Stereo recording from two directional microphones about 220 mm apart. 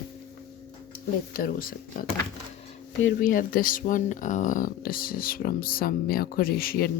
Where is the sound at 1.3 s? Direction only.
40° left (ahead or behind).